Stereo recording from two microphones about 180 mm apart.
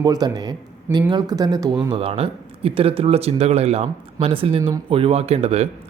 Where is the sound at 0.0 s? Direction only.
20° right (ahead or behind).